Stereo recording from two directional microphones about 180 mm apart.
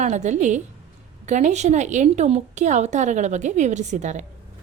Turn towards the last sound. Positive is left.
turn(degrees=-40)  # may be behind; listen again after turning